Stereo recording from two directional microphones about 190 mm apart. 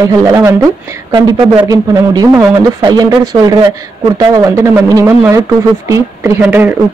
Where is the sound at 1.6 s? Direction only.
15° right (ahead or behind).